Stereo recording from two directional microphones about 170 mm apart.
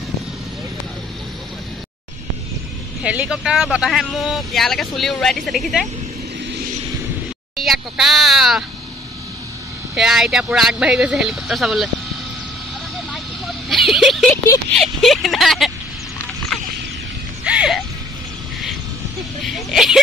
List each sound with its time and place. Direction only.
3.0 s speech: 5° right (ahead or behind)
7.5 s a sound: centre (ahead or behind)
9.9 s speech: centre (ahead or behind)
13.1 s vehicle: centre (ahead or behind)
14.3 s speech: 15° left (ahead or behind)
14.8 s speech: centre (ahead or behind)
16.5 s a sound: 5° left (ahead or behind)
17.5 s music: 5° right (ahead or behind)
19.4 s speech: centre (ahead or behind)